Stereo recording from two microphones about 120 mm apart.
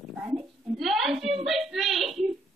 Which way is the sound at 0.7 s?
Centre (ahead or behind).